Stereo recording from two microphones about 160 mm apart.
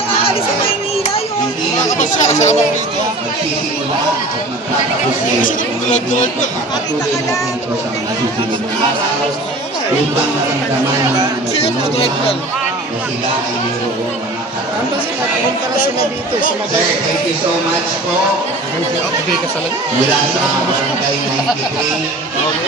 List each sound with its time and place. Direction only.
2.0 s speech: 50° left (ahead or behind)
5.4 s speech: 50° left (ahead or behind)